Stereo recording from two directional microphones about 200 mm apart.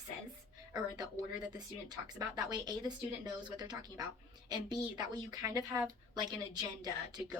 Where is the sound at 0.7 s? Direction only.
20° right (ahead or behind).